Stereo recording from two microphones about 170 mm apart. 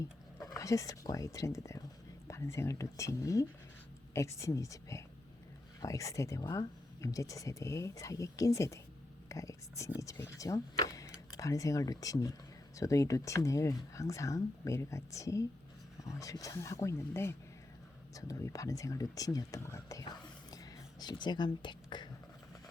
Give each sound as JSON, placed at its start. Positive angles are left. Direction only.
{"t": 0.4, "sound": "speech", "side_deg": 20}